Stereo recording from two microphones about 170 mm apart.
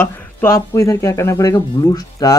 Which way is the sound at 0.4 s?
15° left (ahead or behind).